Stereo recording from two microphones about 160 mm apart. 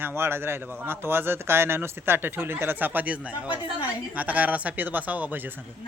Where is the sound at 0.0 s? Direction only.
15° right (ahead or behind).